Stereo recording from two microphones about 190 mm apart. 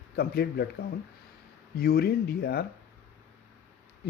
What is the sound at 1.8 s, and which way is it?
Speech, 55° left (ahead or behind).